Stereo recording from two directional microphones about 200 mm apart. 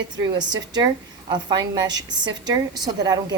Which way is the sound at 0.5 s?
20° right (ahead or behind).